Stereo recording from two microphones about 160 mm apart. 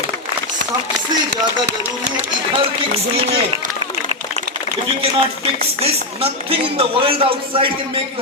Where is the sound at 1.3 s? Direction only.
90° right.